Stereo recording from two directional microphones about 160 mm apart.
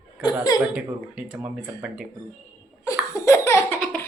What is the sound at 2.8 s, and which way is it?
Laughter, 20° left (ahead or behind).